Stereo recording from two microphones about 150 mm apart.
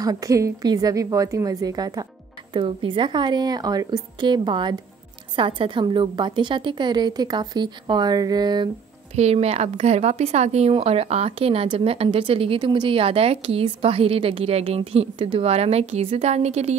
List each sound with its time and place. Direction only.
0.0 s a woman's voice: 25° right (ahead or behind)
9.1 s a woman's voice: 45° right (ahead or behind)